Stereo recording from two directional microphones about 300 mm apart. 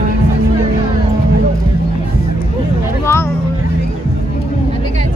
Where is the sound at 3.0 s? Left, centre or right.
Centre.